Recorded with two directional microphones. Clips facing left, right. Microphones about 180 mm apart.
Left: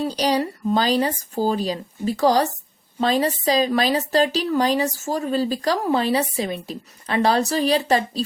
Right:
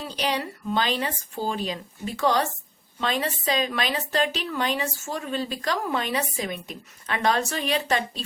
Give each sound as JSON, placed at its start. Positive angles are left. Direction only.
{"t": 0.0, "sound": "a woman's voice", "side_deg": 35}